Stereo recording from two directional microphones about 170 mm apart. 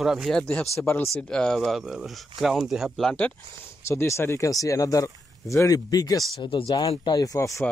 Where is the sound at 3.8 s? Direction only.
15° left (ahead or behind).